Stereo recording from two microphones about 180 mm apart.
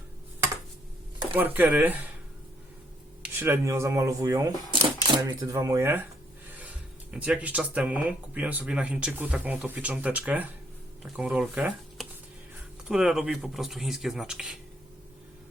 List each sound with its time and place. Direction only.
1.3 s speech: 10° right (ahead or behind)
3.3 s speech: 15° right (ahead or behind)